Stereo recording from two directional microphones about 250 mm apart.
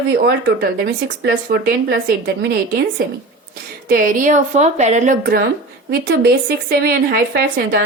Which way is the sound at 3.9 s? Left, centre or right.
Right.